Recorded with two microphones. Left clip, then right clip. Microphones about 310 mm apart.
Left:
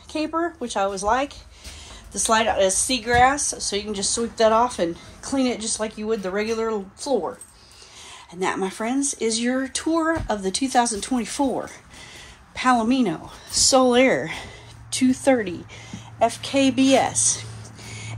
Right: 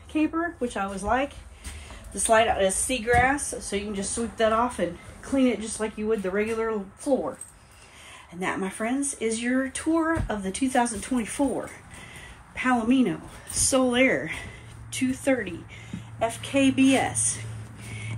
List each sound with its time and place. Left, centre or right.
0.1 s a woman's voice: centre
8.5 s a woman's voice: centre
12.5 s a woman's voice: centre
17.8 s a sound: centre